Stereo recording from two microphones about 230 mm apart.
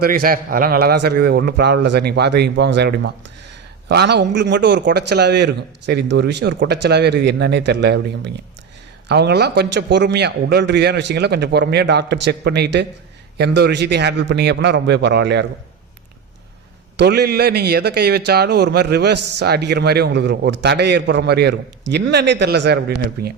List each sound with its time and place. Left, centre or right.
0.0 s a man's voice: right
17.0 s a man's voice: right